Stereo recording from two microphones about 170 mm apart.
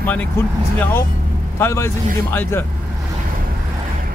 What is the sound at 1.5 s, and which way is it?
Speech, 15° left (ahead or behind).